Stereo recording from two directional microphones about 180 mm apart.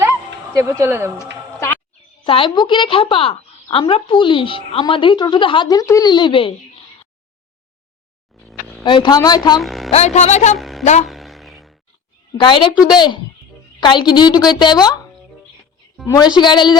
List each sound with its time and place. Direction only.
0.5 s speech: 15° right (ahead or behind)
1.2 s music: 15° left (ahead or behind)
2.2 s a woman's voice: 30° left (ahead or behind)
8.8 s a woman's voice: 25° left (ahead or behind)
9.6 s a sound: centre (ahead or behind)
9.9 s a woman's voice: 40° left (ahead or behind)
10.6 s a sound: centre (ahead or behind)
12.4 s a woman's voice: 25° left (ahead or behind)
16.0 s a woman's voice: 20° left (ahead or behind)